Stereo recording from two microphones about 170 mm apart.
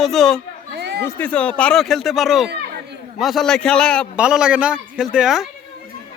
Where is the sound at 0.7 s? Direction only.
75° right (ahead or behind).